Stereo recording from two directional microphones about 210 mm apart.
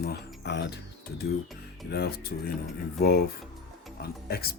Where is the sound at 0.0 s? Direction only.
45° left (ahead or behind).